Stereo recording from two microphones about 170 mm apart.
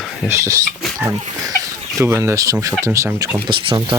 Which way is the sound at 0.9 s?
20° right (ahead or behind).